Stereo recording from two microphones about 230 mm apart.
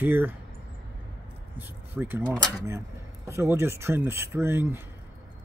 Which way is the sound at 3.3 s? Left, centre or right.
Centre.